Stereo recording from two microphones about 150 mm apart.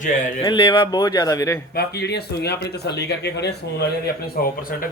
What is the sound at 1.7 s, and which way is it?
Speech, 90° left.